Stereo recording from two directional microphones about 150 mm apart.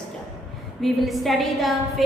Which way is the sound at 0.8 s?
Centre (ahead or behind).